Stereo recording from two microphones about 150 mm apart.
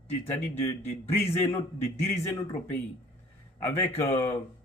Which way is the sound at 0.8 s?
15° left (ahead or behind).